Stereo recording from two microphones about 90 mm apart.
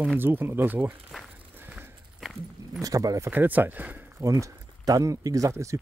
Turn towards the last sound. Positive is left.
turn(degrees=-35)  # may be behind; listen again after turning